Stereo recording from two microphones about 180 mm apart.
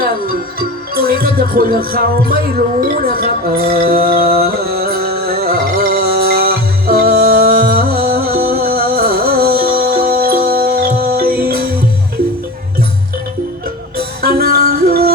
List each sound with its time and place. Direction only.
0.9 s music: 55° right (ahead or behind)
14.2 s music: 60° right (ahead or behind)